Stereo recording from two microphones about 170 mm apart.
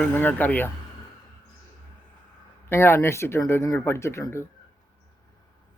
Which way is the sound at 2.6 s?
15° left (ahead or behind).